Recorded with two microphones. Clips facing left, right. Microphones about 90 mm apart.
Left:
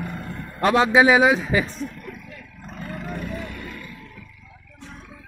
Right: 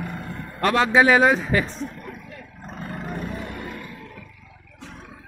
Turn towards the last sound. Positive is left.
turn(degrees=-50)  # may be behind; listen again after turning